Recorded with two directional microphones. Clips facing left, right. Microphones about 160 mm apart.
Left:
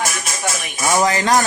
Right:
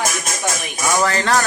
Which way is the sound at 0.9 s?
15° left (ahead or behind).